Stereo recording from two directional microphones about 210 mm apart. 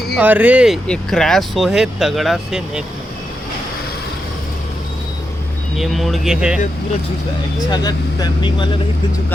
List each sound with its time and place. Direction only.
0.2 s speech: 5° right (ahead or behind)
5.7 s speech: centre (ahead or behind)
7.7 s speech: 20° left (ahead or behind)